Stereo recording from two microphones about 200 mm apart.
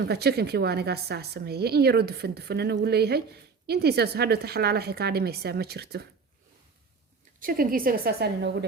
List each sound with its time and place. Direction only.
0.0 s a woman's voice: 55° right (ahead or behind)
7.3 s a woman's voice: 45° right (ahead or behind)